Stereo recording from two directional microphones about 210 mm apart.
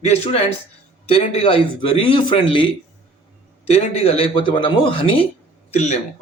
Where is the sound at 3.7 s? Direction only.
30° left (ahead or behind).